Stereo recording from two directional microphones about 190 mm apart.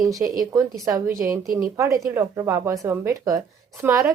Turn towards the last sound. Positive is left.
turn(degrees=-15)  # may be behind; listen again after turning